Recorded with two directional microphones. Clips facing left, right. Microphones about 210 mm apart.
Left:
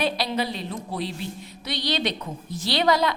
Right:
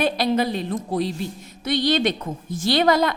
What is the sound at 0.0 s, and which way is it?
A woman's voice, 50° right (ahead or behind).